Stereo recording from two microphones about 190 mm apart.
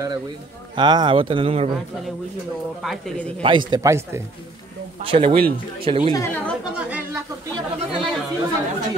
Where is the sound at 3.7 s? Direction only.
15° right (ahead or behind).